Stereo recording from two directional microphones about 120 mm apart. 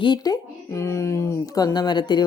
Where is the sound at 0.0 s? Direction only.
40° left (ahead or behind).